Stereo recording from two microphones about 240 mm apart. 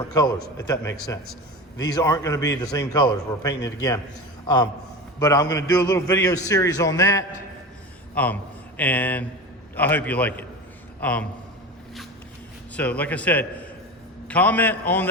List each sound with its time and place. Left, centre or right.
0.1 s a man's voice: centre
12.7 s a man's voice: centre